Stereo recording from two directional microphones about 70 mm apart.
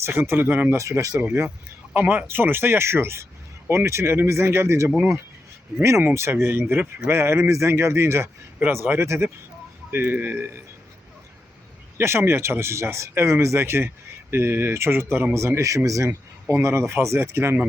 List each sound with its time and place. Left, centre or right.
0.0 s speech: right
0.8 s speech: right
2.0 s speech: right
6.1 s speech: right
11.9 s speech: right